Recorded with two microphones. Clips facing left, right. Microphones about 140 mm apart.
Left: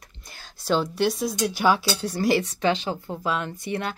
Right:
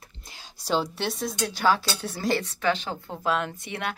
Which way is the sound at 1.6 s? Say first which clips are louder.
Left 1 dB; 15° left (ahead or behind).